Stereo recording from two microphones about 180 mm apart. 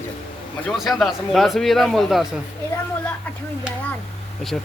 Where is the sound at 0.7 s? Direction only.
Centre (ahead or behind).